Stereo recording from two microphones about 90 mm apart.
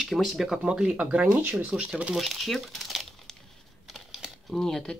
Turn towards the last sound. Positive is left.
turn(degrees=10)  # may be behind; listen again after turning